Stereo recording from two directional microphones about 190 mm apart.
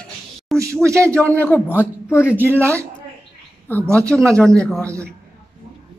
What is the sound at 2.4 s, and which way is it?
Speech, 10° right (ahead or behind).